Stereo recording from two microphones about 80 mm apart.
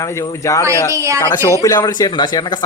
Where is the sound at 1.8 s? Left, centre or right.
Left.